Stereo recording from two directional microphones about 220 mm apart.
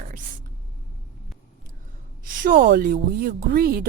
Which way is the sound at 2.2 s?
40° right (ahead or behind).